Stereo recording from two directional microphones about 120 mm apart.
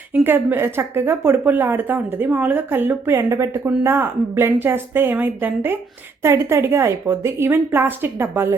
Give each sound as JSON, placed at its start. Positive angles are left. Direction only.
{"t": 0.1, "sound": "speech", "side_deg": -15}